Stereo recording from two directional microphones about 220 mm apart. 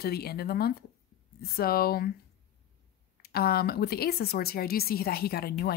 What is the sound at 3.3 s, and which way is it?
A woman's voice, 45° left (ahead or behind).